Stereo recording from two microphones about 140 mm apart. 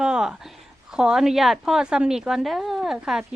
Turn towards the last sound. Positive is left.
turn(degrees=-5)  # may be behind; listen again after turning